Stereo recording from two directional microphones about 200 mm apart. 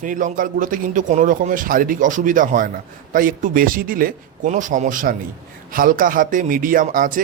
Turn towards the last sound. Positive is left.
turn(degrees=-45)  # may be behind; listen again after turning